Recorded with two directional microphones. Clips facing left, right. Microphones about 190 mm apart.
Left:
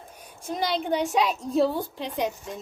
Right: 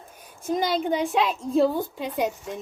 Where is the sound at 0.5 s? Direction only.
Centre (ahead or behind).